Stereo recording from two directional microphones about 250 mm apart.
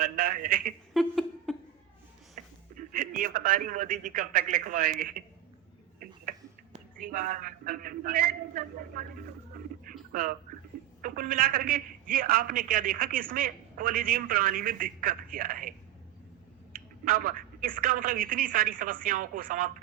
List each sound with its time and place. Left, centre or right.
0.0 s a man's voice: right
0.9 s a sound: centre
2.3 s speech: right
7.0 s a man's voice: right
10.1 s a man's voice: right
17.1 s a man's voice: right